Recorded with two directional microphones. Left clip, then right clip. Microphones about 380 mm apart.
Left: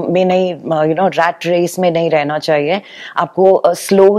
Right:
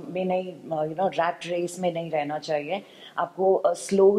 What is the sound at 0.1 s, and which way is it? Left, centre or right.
Speech, left.